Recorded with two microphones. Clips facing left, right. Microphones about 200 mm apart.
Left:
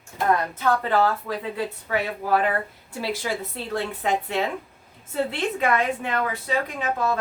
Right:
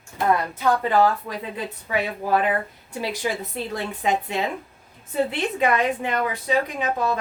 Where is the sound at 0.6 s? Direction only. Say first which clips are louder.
Right 3 dB; 15° right (ahead or behind).